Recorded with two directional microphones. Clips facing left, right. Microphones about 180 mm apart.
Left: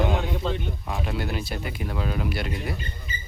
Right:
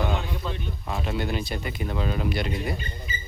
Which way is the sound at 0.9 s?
Centre (ahead or behind).